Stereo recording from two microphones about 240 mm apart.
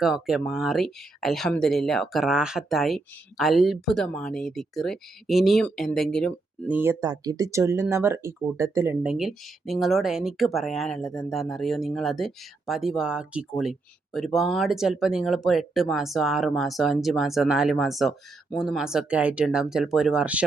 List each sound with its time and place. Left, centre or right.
0.0 s speech: centre
6.7 s speech: centre